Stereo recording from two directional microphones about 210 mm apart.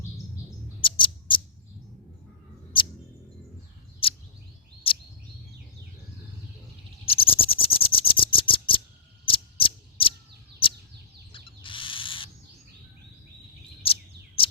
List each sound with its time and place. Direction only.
0.8 s bird: 25° left (ahead or behind)
4.0 s bird: 25° left (ahead or behind)
4.9 s bird vocalization: 25° left (ahead or behind)
7.0 s a sound: 25° left (ahead or behind)
11.3 s owl: 25° left (ahead or behind)
13.8 s chirp: 25° left (ahead or behind)